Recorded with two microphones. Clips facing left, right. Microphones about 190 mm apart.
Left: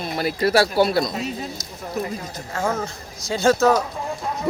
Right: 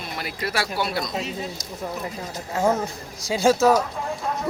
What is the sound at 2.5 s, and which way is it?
A man's voice, 20° right (ahead or behind).